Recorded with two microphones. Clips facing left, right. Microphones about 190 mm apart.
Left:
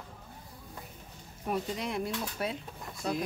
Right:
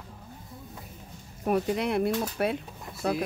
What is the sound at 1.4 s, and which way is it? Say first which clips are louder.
Speech: right 7 dB; 60° right (ahead or behind).